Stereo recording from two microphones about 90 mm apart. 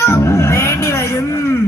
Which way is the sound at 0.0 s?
30° left (ahead or behind).